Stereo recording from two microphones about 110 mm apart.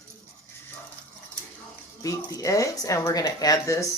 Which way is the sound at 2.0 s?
30° left (ahead or behind).